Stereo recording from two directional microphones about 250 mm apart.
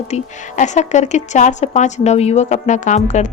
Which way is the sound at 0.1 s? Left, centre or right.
Left.